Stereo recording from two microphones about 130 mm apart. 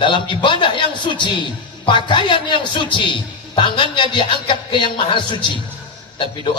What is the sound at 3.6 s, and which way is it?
Speech, 40° left (ahead or behind).